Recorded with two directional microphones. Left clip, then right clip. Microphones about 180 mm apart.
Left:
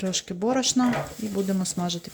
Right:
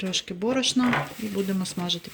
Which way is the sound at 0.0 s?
15° left (ahead or behind).